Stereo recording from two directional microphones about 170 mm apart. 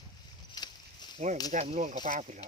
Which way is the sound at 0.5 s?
25° left (ahead or behind).